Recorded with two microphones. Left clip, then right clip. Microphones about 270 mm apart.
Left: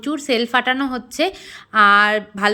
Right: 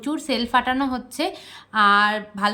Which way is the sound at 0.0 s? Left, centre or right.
Centre.